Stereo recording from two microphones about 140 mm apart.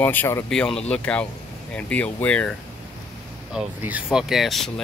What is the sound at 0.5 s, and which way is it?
Speech, 5° left (ahead or behind).